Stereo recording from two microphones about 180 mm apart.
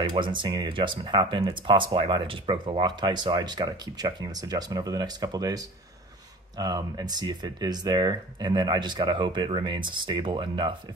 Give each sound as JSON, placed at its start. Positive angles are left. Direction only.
{"t": 0.1, "sound": "speech", "side_deg": -25}